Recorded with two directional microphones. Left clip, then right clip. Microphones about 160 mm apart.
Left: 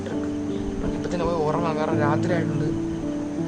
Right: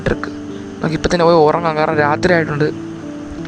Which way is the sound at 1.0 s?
45° right (ahead or behind).